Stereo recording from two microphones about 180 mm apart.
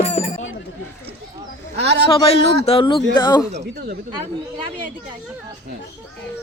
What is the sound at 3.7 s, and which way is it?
Speech, 60° right (ahead or behind).